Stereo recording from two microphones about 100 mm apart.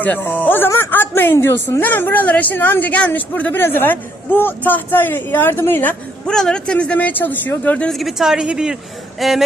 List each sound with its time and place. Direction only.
0.0 s a woman's voice: 20° left (ahead or behind)
6.2 s speech: 5° left (ahead or behind)
7.9 s a woman's voice: 5° right (ahead or behind)